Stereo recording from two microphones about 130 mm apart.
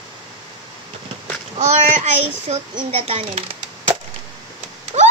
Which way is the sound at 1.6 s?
60° right (ahead or behind).